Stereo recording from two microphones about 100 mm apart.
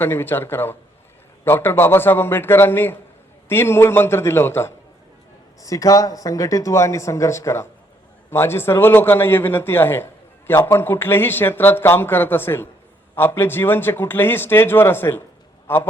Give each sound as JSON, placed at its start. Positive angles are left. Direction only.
{"t": 0.0, "sound": "a man's voice", "side_deg": 20}
{"t": 5.6, "sound": "a man's voice", "side_deg": 35}